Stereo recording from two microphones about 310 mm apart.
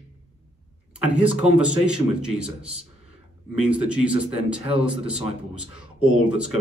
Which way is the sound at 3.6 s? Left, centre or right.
Centre.